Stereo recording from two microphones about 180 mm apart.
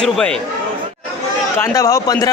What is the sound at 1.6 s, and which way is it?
Speech, 20° left (ahead or behind).